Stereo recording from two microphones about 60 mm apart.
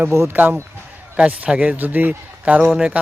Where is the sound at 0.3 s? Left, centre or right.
Right.